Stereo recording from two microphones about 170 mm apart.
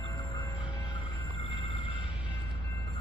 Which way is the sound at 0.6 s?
30° left (ahead or behind).